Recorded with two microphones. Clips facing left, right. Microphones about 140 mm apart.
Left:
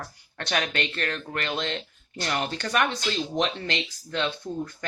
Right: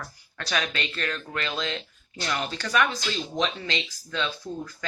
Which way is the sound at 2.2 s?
40° left (ahead or behind).